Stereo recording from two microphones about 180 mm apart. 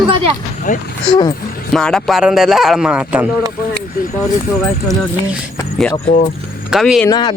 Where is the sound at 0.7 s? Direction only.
45° left (ahead or behind).